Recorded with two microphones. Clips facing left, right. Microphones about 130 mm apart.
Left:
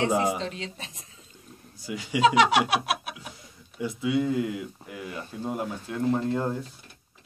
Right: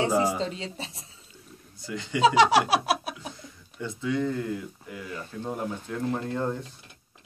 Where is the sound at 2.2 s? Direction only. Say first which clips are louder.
Right 1 dB; 35° right (ahead or behind).